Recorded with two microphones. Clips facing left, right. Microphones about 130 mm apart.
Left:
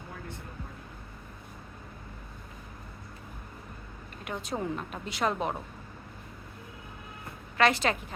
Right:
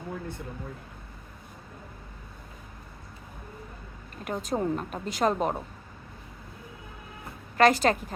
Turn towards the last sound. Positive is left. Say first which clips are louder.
# right 4 dB
turn(degrees=-40)  # may be behind; listen again after turning